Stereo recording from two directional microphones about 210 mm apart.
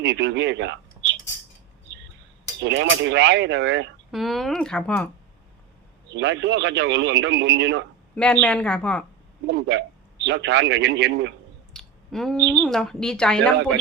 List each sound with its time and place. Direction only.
0.0 s speech: 55° right (ahead or behind)
2.6 s a man's voice: 60° right (ahead or behind)
4.1 s a woman's voice: centre (ahead or behind)
6.1 s a man's voice: 60° right (ahead or behind)
8.1 s a woman's voice: 5° left (ahead or behind)
9.5 s a man's voice: 55° right (ahead or behind)
11.7 s clicking: centre (ahead or behind)
12.5 s a woman's voice: 5° left (ahead or behind)